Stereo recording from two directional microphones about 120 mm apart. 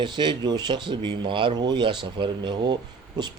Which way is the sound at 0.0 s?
40° right (ahead or behind).